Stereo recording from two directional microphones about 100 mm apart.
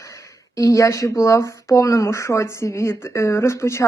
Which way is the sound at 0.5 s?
35° left (ahead or behind).